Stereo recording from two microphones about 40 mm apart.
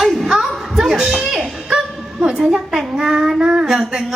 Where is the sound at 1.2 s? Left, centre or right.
Centre.